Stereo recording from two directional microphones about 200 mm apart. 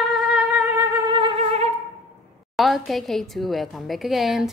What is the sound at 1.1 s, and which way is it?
Music, 30° right (ahead or behind).